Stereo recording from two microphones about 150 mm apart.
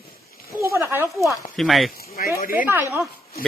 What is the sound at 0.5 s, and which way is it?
Speech, 20° right (ahead or behind).